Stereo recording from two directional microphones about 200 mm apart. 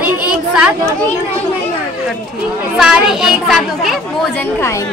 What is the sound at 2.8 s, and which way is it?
A child's voice, 5° right (ahead or behind).